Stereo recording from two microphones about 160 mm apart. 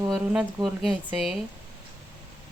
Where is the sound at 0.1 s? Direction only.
Centre (ahead or behind).